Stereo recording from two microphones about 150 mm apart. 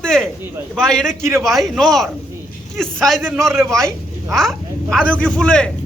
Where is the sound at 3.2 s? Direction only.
15° right (ahead or behind).